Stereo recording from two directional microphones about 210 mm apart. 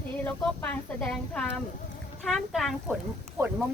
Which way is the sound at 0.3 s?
5° left (ahead or behind).